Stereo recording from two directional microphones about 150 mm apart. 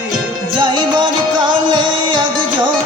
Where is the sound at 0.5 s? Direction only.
30° right (ahead or behind).